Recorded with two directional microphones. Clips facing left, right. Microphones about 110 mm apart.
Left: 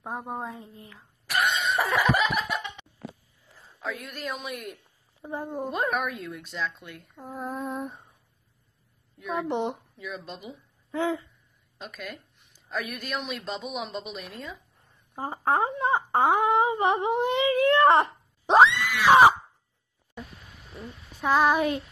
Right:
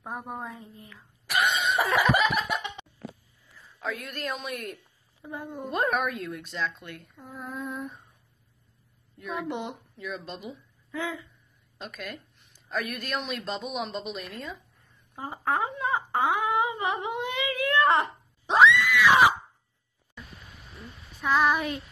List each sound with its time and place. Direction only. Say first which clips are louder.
0.0 s speech: left 2 dB; 25° left (ahead or behind)
1.2 s cough: even; centre (ahead or behind)
3.8 s a woman's voice: right 1 dB; centre (ahead or behind)
5.2 s speech: left 4 dB; 30° left (ahead or behind)
5.7 s a woman's voice: right 3 dB; centre (ahead or behind)
7.2 s female singing: left 5 dB; 35° left (ahead or behind)
9.3 s speech: left 5 dB; 30° left (ahead or behind)
9.9 s a woman's voice: right 1 dB; 5° left (ahead or behind)
10.9 s speech: left 6 dB; 30° left (ahead or behind)
11.8 s a woman's voice: even; centre (ahead or behind)
15.1 s speech: left 3 dB; 35° left (ahead or behind)
21.2 s speech: left 2 dB; 30° left (ahead or behind)